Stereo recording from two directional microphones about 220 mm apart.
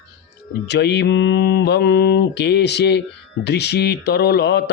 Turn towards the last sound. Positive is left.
turn(degrees=50)  # may be behind; listen again after turning